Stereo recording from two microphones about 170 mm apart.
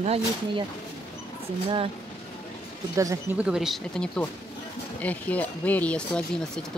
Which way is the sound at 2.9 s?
20° right (ahead or behind).